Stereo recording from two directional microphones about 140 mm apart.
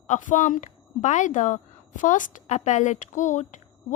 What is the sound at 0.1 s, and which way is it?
A woman's voice, 65° left (ahead or behind).